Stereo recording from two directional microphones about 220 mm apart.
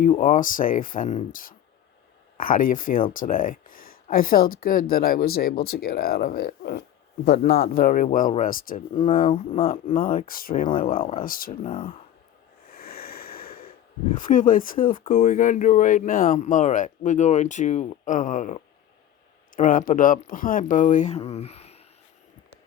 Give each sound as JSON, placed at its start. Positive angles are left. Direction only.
{"t": 0.0, "sound": "speech", "side_deg": 35}
{"t": 10.9, "sound": "speech", "side_deg": 25}
{"t": 11.2, "sound": "speech", "side_deg": 40}
{"t": 12.7, "sound": "snort", "side_deg": 45}
{"t": 14.2, "sound": "speech", "side_deg": 35}